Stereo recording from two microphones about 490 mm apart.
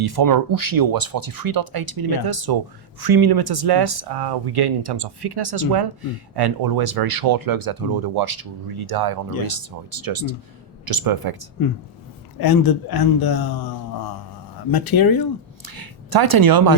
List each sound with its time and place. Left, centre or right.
0.0 s speech: right
12.4 s a man's voice: left
15.6 s speech: right